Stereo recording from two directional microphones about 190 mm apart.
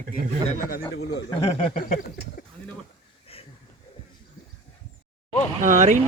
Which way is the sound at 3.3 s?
30° left (ahead or behind).